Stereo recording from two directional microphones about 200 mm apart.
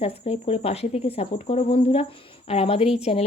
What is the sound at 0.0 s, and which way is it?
A woman's voice, 30° left (ahead or behind).